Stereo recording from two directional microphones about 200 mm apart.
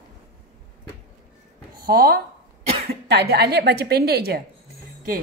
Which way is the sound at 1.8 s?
50° right (ahead or behind).